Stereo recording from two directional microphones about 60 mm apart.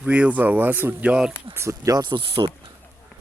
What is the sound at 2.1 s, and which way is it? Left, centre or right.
Speech, right.